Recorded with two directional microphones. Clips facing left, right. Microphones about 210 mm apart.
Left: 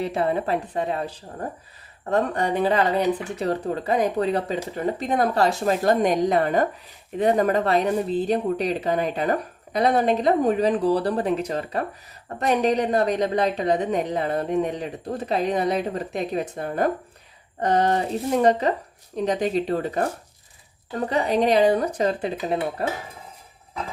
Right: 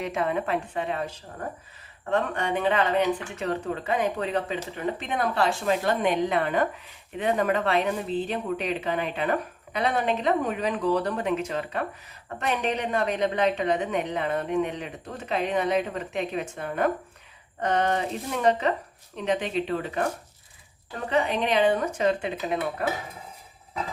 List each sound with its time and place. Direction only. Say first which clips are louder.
0.0 s speech: left 4 dB; 35° left (ahead or behind)